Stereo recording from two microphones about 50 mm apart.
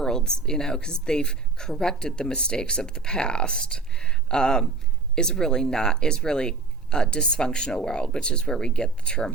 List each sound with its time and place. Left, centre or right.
0.0 s speech: centre